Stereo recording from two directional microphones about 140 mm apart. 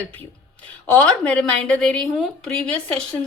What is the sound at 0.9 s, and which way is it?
A woman's voice, 10° left (ahead or behind).